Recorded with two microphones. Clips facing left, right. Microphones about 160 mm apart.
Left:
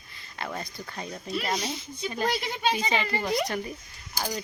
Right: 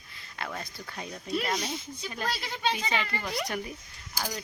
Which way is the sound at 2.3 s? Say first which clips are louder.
Left 1 dB; 20° left (ahead or behind).